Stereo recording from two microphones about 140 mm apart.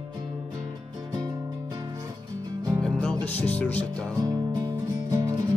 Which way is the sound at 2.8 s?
5° left (ahead or behind).